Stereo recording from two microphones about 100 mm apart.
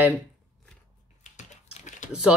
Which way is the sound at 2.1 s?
10° right (ahead or behind).